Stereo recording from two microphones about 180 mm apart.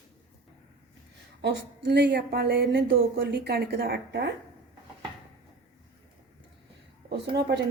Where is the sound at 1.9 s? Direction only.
75° right (ahead or behind).